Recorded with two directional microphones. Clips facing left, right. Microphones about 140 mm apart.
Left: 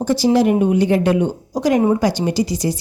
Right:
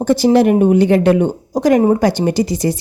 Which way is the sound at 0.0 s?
55° right (ahead or behind).